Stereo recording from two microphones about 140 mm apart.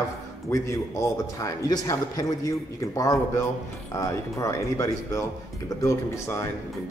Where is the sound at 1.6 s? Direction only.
30° left (ahead or behind).